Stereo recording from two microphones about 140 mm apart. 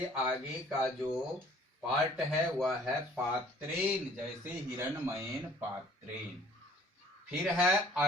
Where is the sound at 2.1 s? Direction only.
5° right (ahead or behind).